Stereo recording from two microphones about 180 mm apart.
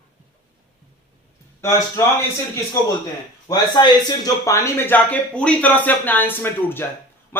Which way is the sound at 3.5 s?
25° left (ahead or behind).